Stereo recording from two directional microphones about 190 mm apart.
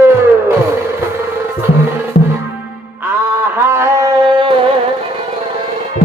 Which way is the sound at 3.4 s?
10° right (ahead or behind).